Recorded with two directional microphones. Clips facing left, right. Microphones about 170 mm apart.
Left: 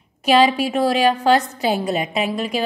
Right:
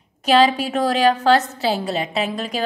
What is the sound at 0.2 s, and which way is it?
A woman's voice, 10° left (ahead or behind).